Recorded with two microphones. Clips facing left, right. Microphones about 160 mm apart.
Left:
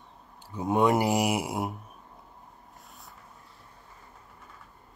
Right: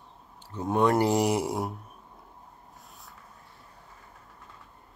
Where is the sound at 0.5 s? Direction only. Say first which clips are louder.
Even; 15° left (ahead or behind).